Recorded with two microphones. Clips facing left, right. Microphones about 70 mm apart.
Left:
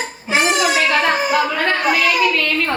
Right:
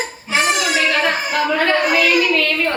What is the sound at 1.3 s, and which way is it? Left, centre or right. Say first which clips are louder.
Speech: left 2 dB; centre.